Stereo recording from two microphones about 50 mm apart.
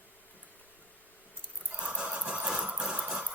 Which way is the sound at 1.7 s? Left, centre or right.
Right.